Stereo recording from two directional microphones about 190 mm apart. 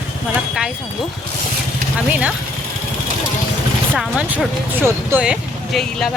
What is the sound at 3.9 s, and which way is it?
Speech, 5° right (ahead or behind).